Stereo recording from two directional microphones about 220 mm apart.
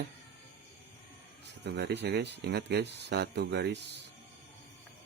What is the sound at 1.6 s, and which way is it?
Speech, 50° right (ahead or behind).